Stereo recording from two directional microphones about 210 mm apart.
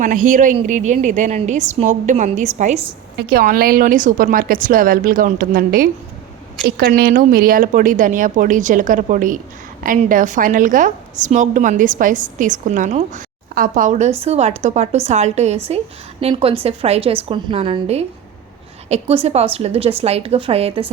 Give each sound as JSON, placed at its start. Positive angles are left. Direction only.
{"t": 0.0, "sound": "a woman's voice", "side_deg": -40}
{"t": 3.2, "sound": "a woman's voice", "side_deg": -45}